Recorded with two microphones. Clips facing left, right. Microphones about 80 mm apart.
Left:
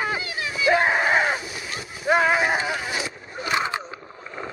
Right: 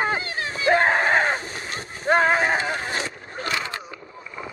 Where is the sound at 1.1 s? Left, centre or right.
Right.